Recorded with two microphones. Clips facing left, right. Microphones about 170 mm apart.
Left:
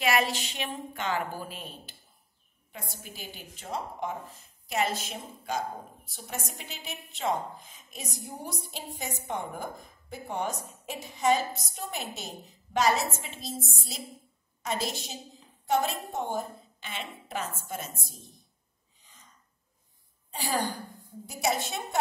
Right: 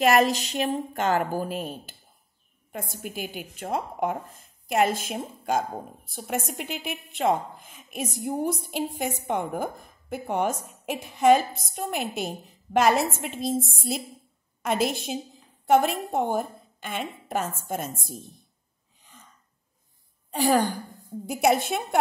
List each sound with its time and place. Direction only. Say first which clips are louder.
0.0 s a woman's voice: right 7 dB; 40° right (ahead or behind)
21.3 s a woman's voice: right 8 dB; 55° right (ahead or behind)